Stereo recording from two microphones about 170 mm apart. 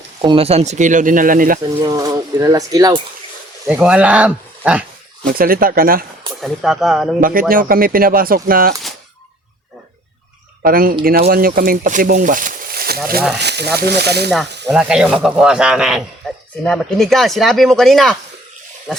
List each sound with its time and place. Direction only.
0.2 s speech: 30° right (ahead or behind); by 1.5 s 55° right (ahead or behind)
1.8 s speech: 20° right (ahead or behind)
3.7 s speech: 5° right (ahead or behind)
5.4 s speech: 60° right (ahead or behind)
6.4 s speech: centre (ahead or behind)
7.2 s speech: 55° right (ahead or behind)
10.6 s speech: 55° right (ahead or behind)
13.4 s speech: 80° right
14.7 s speech: 5° right (ahead or behind)